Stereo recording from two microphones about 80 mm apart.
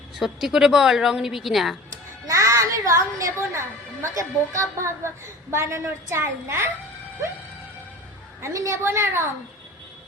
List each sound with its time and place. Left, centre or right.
0.2 s a woman's voice: centre
1.9 s a woman's voice: right
8.4 s a woman's voice: right